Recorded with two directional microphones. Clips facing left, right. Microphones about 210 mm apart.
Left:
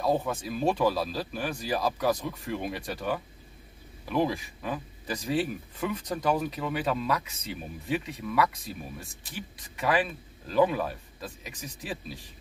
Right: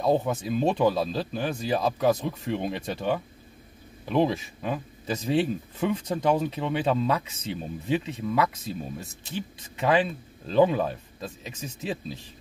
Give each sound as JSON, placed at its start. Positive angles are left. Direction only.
{"t": 0.0, "sound": "speech", "side_deg": -20}